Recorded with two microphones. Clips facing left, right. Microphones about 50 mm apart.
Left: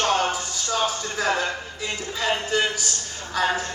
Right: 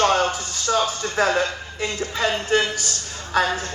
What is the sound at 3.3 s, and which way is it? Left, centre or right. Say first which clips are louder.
Speech: right 3 dB; right.